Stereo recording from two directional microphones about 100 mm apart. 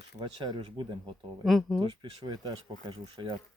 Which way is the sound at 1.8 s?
45° right (ahead or behind).